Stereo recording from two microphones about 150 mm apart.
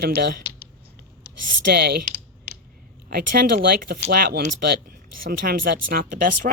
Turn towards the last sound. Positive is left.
turn(degrees=-70)  # may be behind; listen again after turning